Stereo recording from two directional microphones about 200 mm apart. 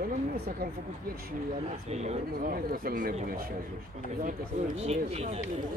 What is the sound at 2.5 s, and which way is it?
Speech, 45° right (ahead or behind).